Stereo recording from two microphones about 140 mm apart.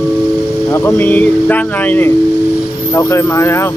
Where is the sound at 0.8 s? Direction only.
15° left (ahead or behind).